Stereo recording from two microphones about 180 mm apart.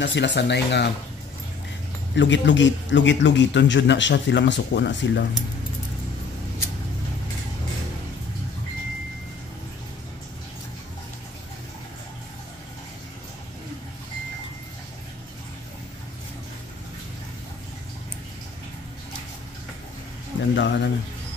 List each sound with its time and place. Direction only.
0.0 s speech: 75° left (ahead or behind)
2.1 s a man's voice: 85° left
20.5 s speech: 75° left (ahead or behind)